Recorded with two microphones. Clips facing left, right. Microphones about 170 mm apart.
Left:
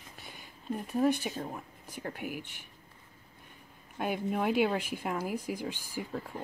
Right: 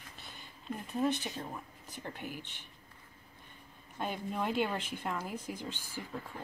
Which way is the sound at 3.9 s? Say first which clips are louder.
Left 5 dB; 10° left (ahead or behind).